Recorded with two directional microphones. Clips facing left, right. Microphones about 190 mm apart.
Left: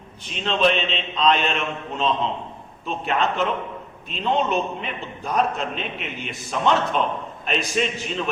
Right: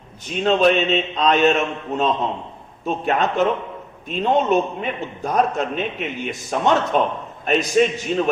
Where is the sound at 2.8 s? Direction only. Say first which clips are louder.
Right 3 dB; 45° right (ahead or behind).